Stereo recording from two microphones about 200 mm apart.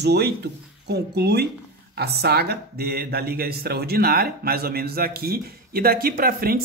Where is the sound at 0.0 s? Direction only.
55° right (ahead or behind).